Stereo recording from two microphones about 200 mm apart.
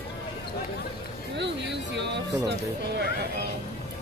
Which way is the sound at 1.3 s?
60° right (ahead or behind).